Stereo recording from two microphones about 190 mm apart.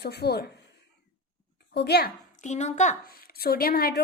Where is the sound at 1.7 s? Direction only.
60° left (ahead or behind).